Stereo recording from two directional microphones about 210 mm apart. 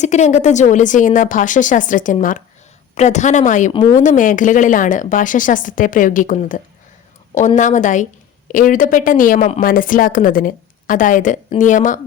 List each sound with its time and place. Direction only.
0.0 s a woman's voice: 35° left (ahead or behind)
3.7 s speech: 25° left (ahead or behind)
4.0 s a woman's voice: 40° left (ahead or behind)